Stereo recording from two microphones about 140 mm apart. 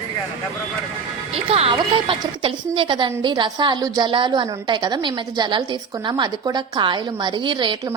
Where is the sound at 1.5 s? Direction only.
45° right (ahead or behind).